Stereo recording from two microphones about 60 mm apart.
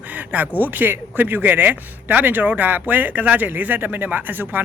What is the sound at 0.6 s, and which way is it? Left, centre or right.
Speech, right.